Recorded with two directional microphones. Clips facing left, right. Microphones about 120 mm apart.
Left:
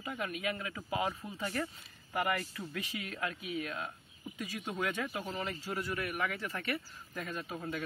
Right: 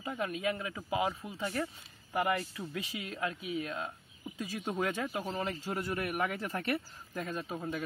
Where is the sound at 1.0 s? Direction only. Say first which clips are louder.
Right 2 dB; 5° right (ahead or behind); by 5.5 s 25° right (ahead or behind).